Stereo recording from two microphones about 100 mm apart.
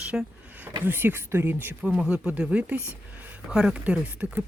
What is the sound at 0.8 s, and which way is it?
Speech, 20° right (ahead or behind).